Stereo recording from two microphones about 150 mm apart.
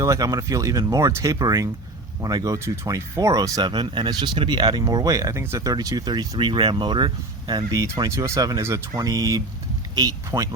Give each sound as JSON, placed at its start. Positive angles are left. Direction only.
{"t": 0.0, "sound": "speech", "side_deg": -20}